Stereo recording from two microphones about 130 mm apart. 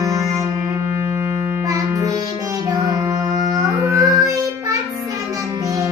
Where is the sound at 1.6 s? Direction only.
25° right (ahead or behind).